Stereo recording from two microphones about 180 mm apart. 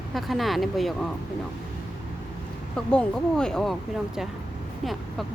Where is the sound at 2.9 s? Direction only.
5° left (ahead or behind).